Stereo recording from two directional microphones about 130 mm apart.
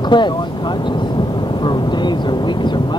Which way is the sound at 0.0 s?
35° left (ahead or behind).